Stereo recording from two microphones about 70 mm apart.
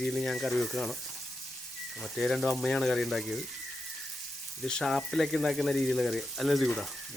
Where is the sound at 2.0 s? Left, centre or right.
Centre.